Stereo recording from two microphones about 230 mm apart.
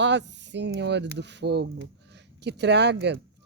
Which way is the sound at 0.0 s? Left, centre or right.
Right.